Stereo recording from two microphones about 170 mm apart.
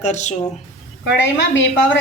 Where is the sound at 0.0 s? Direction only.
40° left (ahead or behind).